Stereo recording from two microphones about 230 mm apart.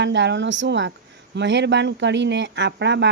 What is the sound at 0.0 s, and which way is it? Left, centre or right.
Speech, right.